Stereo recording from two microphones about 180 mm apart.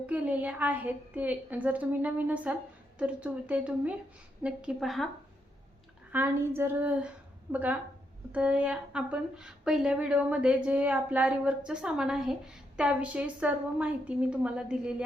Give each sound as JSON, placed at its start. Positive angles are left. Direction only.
{"t": 0.0, "sound": "a woman's voice", "side_deg": -10}
{"t": 6.1, "sound": "a woman's voice", "side_deg": -10}